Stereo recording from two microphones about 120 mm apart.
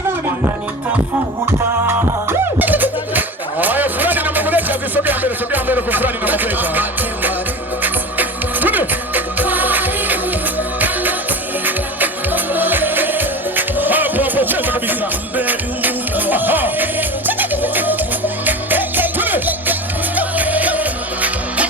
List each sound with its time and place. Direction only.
1.9 s music: 20° right (ahead or behind)